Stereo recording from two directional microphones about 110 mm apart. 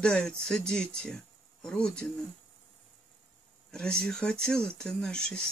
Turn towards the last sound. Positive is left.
turn(degrees=10)  # may be behind; listen again after turning